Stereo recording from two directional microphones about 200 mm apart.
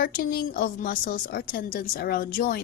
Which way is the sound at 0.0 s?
45° left (ahead or behind).